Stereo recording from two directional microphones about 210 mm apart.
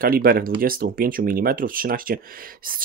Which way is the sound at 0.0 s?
45° right (ahead or behind).